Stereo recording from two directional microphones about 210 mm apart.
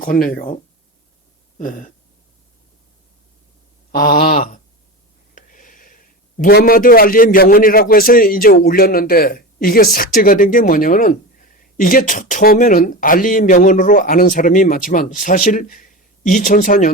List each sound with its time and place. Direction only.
0.0 s a man's voice: 45° left (ahead or behind)
1.5 s a man's voice: 40° left (ahead or behind)
3.9 s a man's voice: 40° left (ahead or behind)